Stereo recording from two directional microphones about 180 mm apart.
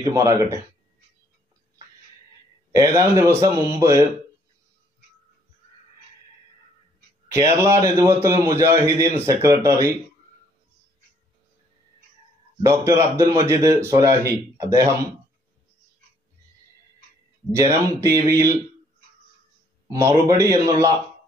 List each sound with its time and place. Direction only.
0.1 s speech: 20° right (ahead or behind)
2.7 s a man's voice: 20° right (ahead or behind)
7.2 s a man's voice: 15° right (ahead or behind)
12.6 s a man's voice: 15° right (ahead or behind)
17.5 s a man's voice: 15° right (ahead or behind)
19.9 s a man's voice: 15° right (ahead or behind)